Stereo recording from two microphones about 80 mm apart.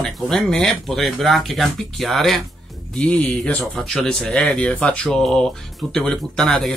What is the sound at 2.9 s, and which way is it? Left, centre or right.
Speech, centre.